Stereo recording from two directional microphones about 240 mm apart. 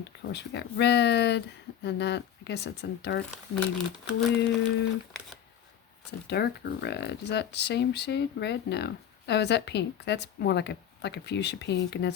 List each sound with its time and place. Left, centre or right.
0.3 s speech: left
3.5 s speech: centre
4.4 s speech: left
6.2 s speech: left